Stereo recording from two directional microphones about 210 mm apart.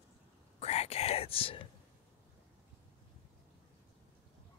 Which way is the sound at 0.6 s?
30° left (ahead or behind).